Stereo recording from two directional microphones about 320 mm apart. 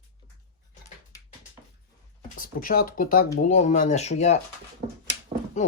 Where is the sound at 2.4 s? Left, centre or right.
Left.